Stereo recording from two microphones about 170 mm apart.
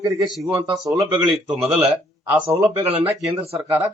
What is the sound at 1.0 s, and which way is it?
Speech, 20° right (ahead or behind).